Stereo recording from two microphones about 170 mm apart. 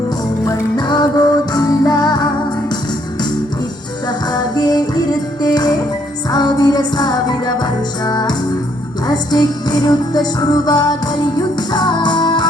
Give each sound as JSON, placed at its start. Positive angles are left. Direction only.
{"t": 0.4, "sound": "music", "side_deg": 25}
{"t": 4.3, "sound": "music", "side_deg": 25}